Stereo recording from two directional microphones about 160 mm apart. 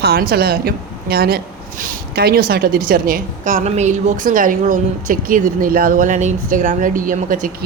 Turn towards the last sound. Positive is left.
turn(degrees=-55)  # may be behind; listen again after turning